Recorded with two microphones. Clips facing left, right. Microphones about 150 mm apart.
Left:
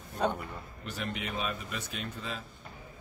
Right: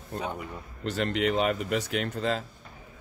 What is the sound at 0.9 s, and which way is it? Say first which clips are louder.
Speech: right 11 dB; 85° right.